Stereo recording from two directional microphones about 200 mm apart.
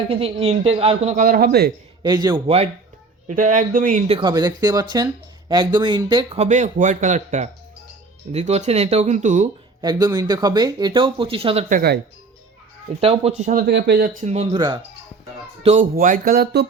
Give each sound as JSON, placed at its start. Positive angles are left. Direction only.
{"t": 0.1, "sound": "speech", "side_deg": -30}
{"t": 2.0, "sound": "a man's voice", "side_deg": -20}
{"t": 3.2, "sound": "speech", "side_deg": -40}
{"t": 9.8, "sound": "speech", "side_deg": -20}
{"t": 11.7, "sound": "speech", "side_deg": -50}
{"t": 13.0, "sound": "speech", "side_deg": -30}
{"t": 14.5, "sound": "speech", "side_deg": -20}
{"t": 15.6, "sound": "speech", "side_deg": -35}